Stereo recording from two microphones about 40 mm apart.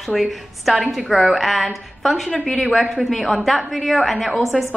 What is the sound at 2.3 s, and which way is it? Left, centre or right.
Speech, centre.